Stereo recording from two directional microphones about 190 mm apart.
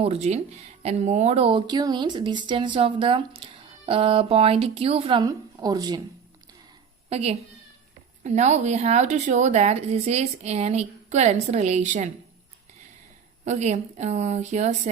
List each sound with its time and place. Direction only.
0.0 s speech: 35° right (ahead or behind)
7.1 s a woman's voice: 35° right (ahead or behind)
13.4 s a woman's voice: 35° right (ahead or behind)